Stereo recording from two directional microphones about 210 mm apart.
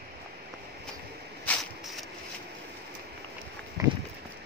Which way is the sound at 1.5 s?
Centre (ahead or behind).